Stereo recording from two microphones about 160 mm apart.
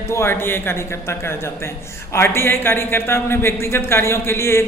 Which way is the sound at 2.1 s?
15° left (ahead or behind).